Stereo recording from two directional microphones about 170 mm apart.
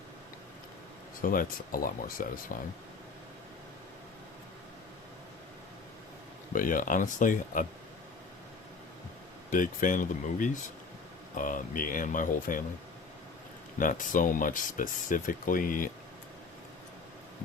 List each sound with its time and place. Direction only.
1.2 s speech: 55° left (ahead or behind)
6.5 s speech: 50° left (ahead or behind)
9.5 s speech: 50° left (ahead or behind)
13.7 s speech: 50° left (ahead or behind)